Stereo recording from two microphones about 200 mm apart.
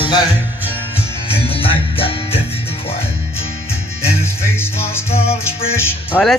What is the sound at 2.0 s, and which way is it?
Music, 25° left (ahead or behind).